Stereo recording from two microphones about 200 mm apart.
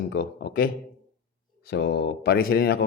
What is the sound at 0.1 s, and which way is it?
Speech, 50° left (ahead or behind).